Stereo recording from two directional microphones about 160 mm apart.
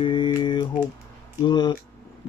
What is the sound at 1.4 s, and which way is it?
Speech, 30° left (ahead or behind).